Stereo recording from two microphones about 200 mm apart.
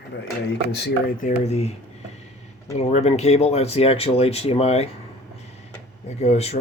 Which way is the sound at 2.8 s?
35° left (ahead or behind).